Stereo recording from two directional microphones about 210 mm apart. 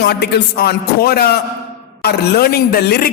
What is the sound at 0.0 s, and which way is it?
Speech, 50° left (ahead or behind).